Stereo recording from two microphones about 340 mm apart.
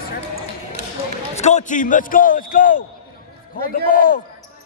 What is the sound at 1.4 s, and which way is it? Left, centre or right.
Speech, left.